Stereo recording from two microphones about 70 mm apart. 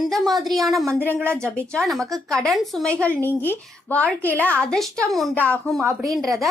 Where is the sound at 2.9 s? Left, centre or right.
Centre.